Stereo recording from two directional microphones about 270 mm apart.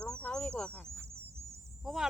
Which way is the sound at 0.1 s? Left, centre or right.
Centre.